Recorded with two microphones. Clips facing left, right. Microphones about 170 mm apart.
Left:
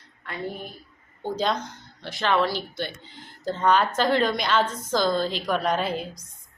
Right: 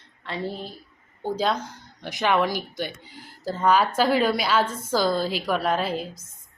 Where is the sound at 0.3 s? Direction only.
30° right (ahead or behind).